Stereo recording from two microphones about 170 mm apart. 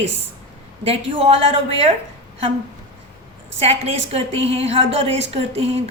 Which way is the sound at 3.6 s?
35° right (ahead or behind).